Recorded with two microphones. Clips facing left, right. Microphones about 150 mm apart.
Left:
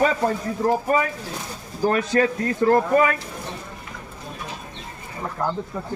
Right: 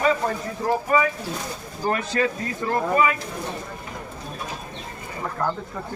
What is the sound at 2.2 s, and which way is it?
Speech, 50° left (ahead or behind).